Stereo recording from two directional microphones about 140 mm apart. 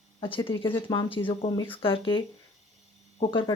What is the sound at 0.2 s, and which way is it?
Speech, 40° left (ahead or behind).